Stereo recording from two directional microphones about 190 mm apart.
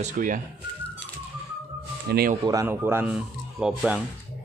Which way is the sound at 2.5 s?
15° right (ahead or behind).